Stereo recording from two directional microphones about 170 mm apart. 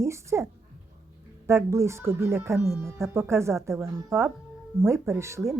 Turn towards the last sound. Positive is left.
turn(degrees=-15)  # may be behind; listen again after turning